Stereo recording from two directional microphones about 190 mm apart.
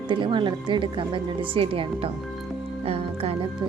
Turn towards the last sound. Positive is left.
turn(degrees=-30)  # may be behind; listen again after turning